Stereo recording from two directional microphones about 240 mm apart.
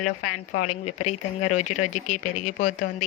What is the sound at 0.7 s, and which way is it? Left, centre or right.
Speech, left.